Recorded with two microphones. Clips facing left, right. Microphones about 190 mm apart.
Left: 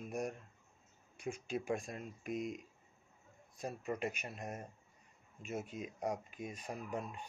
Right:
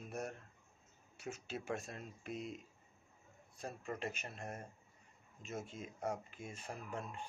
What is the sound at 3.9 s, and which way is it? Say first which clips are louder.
Speech: left 3 dB; 15° left (ahead or behind).